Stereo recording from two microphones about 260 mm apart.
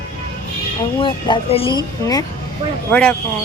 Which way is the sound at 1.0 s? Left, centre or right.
Centre.